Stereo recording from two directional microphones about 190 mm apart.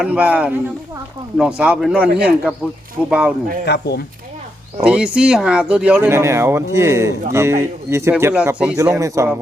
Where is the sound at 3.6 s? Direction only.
60° left (ahead or behind).